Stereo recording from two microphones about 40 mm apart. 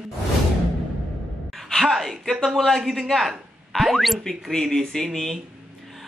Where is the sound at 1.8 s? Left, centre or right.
Centre.